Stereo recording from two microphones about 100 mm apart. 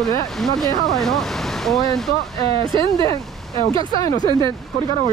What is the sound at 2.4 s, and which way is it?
Speech, 35° left (ahead or behind).